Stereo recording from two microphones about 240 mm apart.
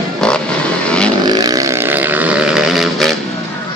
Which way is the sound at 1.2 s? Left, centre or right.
Centre.